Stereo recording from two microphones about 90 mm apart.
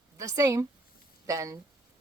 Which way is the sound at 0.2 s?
40° right (ahead or behind).